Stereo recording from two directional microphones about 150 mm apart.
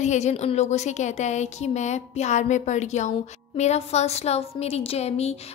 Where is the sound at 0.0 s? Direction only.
50° left (ahead or behind).